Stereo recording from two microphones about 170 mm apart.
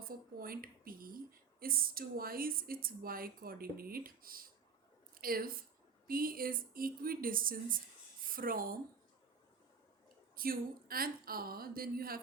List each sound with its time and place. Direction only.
0.0 s a woman's voice: 60° right (ahead or behind)
10.3 s speech: 60° right (ahead or behind)